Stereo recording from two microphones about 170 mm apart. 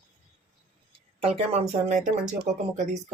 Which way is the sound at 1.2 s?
40° right (ahead or behind).